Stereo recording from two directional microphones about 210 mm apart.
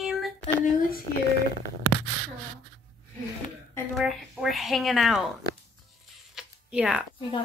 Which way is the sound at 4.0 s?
Centre (ahead or behind).